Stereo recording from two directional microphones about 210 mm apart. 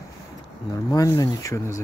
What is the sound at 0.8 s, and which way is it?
Speech, 15° left (ahead or behind).